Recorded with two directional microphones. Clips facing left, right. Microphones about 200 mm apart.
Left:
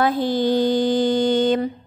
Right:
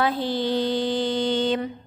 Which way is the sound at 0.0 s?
45° left (ahead or behind).